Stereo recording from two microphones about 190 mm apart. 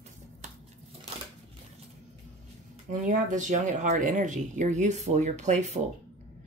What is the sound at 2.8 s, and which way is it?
Speech, 40° right (ahead or behind).